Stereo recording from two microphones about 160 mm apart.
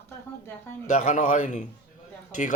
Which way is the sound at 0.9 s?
50° left (ahead or behind).